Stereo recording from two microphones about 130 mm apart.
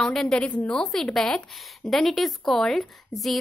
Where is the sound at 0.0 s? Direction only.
5° left (ahead or behind).